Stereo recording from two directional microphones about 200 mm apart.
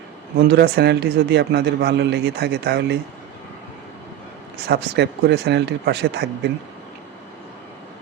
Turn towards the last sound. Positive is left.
turn(degrees=-55)  # may be behind; listen again after turning